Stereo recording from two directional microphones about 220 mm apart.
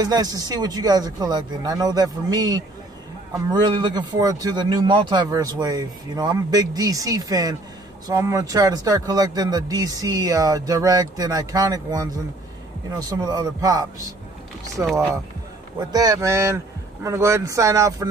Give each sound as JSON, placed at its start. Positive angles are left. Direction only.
{"t": 0.0, "sound": "speech", "side_deg": -15}
{"t": 13.1, "sound": "speech", "side_deg": -15}